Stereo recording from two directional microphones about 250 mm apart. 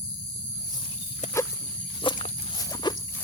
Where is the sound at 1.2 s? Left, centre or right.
Left.